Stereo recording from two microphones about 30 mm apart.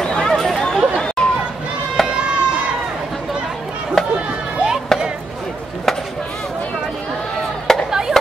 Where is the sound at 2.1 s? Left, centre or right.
Right.